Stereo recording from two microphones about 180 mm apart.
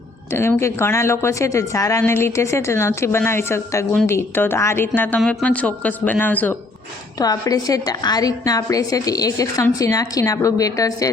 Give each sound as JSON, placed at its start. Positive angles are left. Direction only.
{"t": 0.3, "sound": "a woman's voice", "side_deg": 15}
{"t": 7.2, "sound": "a woman's voice", "side_deg": 20}